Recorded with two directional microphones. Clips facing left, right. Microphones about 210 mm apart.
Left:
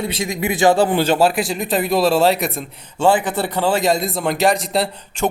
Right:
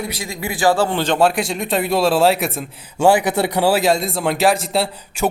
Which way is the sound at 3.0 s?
10° right (ahead or behind).